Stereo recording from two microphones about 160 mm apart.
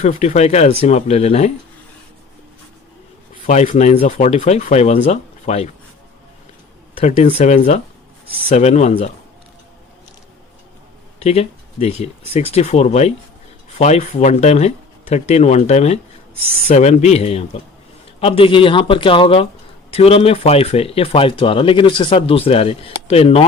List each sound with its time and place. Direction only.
0.0 s speech: 45° left (ahead or behind)
3.4 s speech: 50° left (ahead or behind)
7.2 s speech: 40° left (ahead or behind)
7.5 s speech: 55° left (ahead or behind)
11.2 s speech: 40° left (ahead or behind)